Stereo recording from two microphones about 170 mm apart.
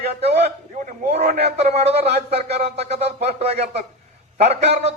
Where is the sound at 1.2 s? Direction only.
60° right (ahead or behind).